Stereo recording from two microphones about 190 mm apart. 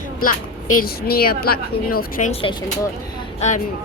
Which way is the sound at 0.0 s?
45° left (ahead or behind).